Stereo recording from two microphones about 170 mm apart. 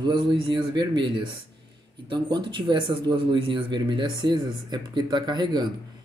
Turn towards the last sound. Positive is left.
turn(degrees=-25)  # may be behind; listen again after turning